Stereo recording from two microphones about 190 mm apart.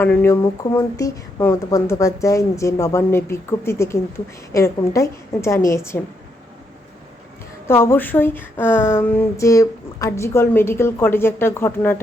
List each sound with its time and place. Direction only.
0.0 s a woman's voice: 10° left (ahead or behind)
7.7 s a woman's voice: 10° left (ahead or behind)